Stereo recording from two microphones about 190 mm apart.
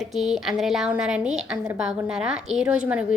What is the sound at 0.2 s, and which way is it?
A woman's voice, centre (ahead or behind).